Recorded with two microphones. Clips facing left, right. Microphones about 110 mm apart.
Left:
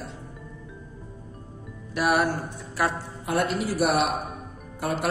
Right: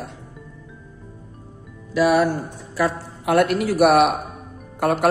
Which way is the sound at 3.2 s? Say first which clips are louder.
Right 8 dB; 70° right (ahead or behind).